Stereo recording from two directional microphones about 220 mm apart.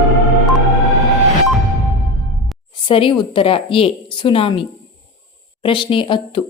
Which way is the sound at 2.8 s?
25° left (ahead or behind).